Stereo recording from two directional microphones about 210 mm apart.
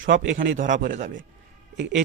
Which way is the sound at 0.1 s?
55° right (ahead or behind).